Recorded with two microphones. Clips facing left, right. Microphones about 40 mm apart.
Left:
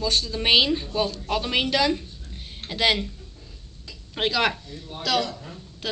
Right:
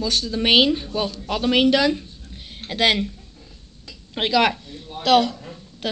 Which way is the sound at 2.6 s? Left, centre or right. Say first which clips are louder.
Right 3 dB; right.